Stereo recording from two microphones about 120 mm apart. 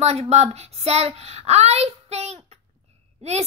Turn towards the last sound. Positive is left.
turn(degrees=-65)  # may be behind; listen again after turning